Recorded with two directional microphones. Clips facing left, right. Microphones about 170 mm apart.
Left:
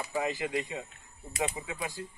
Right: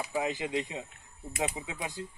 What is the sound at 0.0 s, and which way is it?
Speech, 15° right (ahead or behind).